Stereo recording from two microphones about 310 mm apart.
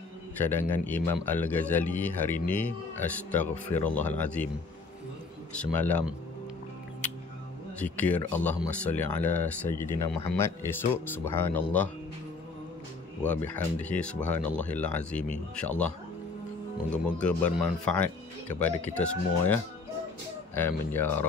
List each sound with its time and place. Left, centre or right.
0.4 s a man's voice: centre
5.6 s a man's voice: centre
7.8 s a man's voice: centre
13.6 s a man's voice: centre
16.9 s a man's voice: centre